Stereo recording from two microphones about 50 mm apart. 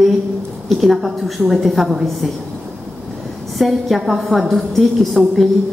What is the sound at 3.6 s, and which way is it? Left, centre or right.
A woman's voice, centre.